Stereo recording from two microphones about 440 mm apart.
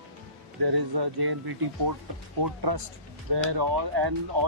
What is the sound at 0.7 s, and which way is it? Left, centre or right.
Speech, right.